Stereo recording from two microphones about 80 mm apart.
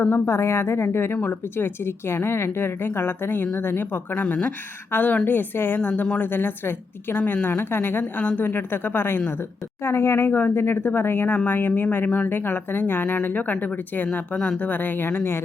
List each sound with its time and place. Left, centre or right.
0.3 s a woman's voice: left; by 14.7 s centre
14.7 s a woman's voice: left